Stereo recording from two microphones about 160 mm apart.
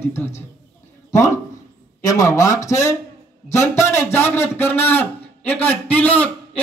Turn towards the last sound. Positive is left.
turn(degrees=10)  # may be behind; listen again after turning